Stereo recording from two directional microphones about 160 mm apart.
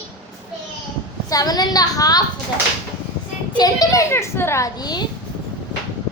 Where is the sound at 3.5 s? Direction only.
25° left (ahead or behind).